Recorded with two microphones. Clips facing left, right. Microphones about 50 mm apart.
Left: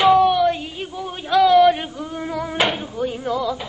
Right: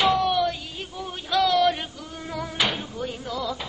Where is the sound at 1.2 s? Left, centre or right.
Centre.